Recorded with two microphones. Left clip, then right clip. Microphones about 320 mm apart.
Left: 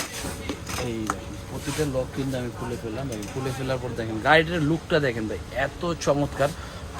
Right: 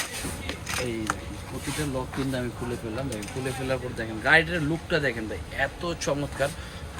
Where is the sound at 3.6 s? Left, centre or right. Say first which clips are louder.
Left 1 dB; centre.